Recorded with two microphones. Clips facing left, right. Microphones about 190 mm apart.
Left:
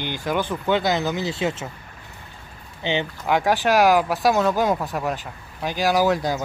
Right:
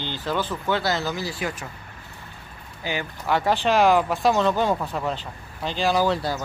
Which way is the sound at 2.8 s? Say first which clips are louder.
Left 3 dB; 20° left (ahead or behind).